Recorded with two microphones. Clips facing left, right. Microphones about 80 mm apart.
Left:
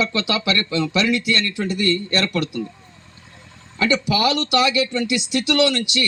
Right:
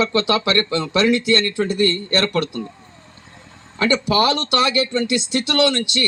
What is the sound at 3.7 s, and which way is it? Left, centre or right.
Speech, right.